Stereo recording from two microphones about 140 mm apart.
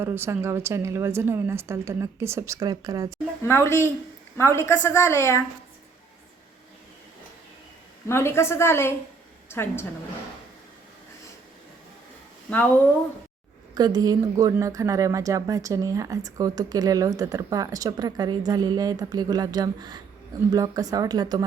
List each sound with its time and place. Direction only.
0.0 s speech: 15° right (ahead or behind)
3.4 s a woman's voice: 20° left (ahead or behind)
8.0 s a woman's voice: 15° left (ahead or behind)
13.7 s speech: 30° right (ahead or behind)